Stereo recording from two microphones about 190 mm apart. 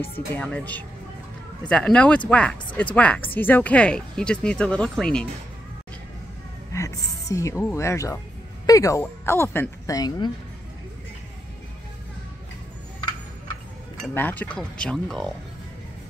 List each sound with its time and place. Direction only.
0.1 s speech: 10° left (ahead or behind)
6.7 s speech: 15° left (ahead or behind)
14.0 s speech: 10° left (ahead or behind)